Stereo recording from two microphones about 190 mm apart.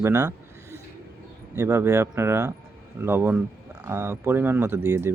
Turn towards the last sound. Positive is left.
turn(degrees=-15)  # may be behind; listen again after turning